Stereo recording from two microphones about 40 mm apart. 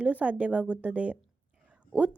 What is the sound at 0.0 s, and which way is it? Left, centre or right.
A woman's voice, right.